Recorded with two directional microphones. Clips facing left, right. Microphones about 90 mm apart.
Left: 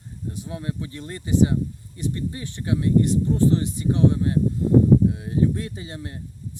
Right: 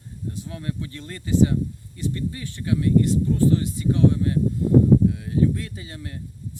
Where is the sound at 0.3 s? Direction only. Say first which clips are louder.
Left 1 dB; 20° left (ahead or behind).